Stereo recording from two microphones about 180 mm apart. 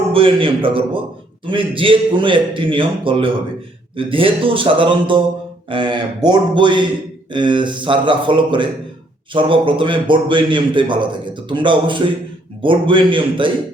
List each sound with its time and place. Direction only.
0.1 s a man's voice: 30° right (ahead or behind)